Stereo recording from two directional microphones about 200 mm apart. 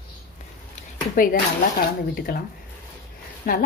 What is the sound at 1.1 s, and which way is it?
Speech, 45° left (ahead or behind).